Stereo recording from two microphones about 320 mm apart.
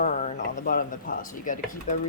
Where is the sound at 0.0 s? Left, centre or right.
Left.